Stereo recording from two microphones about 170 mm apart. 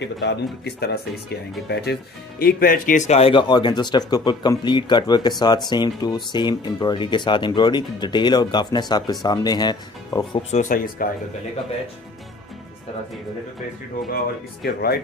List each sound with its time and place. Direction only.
0.0 s speech: 80° left; by 10.4 s 25° left (ahead or behind)
10.5 s speech: 50° left (ahead or behind)
14.1 s speech: 65° left (ahead or behind)